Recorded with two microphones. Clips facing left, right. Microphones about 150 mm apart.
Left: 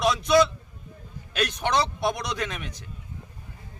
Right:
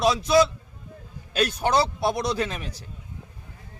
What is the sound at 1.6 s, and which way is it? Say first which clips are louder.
A man's voice: right 2 dB; 35° right (ahead or behind).